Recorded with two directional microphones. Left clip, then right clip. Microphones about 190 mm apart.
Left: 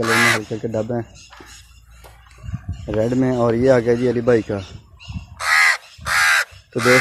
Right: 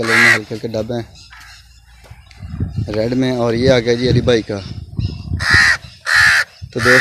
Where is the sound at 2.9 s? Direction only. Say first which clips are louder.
Right 1 dB; 25° right (ahead or behind).